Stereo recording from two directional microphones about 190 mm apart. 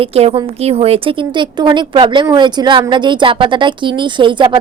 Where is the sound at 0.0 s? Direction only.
30° right (ahead or behind).